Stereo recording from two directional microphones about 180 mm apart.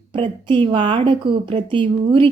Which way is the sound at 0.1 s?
25° right (ahead or behind).